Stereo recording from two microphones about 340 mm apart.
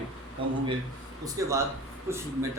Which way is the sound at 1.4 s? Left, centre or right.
Centre.